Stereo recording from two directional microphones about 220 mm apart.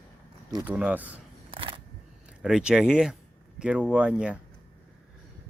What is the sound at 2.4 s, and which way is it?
Speech, 5° right (ahead or behind).